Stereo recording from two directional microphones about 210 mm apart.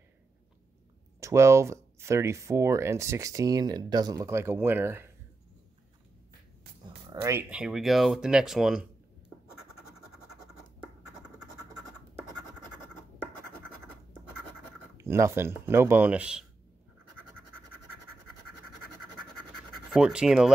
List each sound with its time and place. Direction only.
1.2 s speech: 15° right (ahead or behind)
7.1 s speech: 10° right (ahead or behind)
15.0 s speech: 15° right (ahead or behind)
19.7 s speech: centre (ahead or behind)